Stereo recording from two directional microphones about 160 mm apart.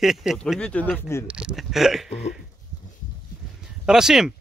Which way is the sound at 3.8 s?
5° right (ahead or behind).